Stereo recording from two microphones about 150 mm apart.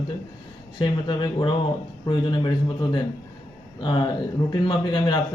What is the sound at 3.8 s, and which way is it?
Speech, 30° left (ahead or behind).